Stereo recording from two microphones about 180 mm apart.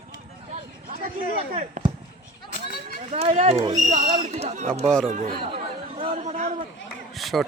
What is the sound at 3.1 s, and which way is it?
Speech, 35° right (ahead or behind).